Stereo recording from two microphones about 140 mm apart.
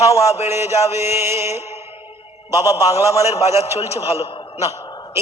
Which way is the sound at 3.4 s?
50° left (ahead or behind).